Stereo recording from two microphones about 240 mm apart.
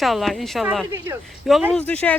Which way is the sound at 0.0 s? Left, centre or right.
Centre.